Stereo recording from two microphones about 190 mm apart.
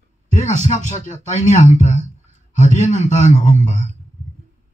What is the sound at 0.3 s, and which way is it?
A man's voice, 40° left (ahead or behind).